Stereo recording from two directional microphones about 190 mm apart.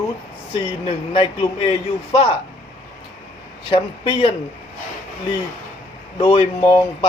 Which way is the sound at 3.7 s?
30° left (ahead or behind).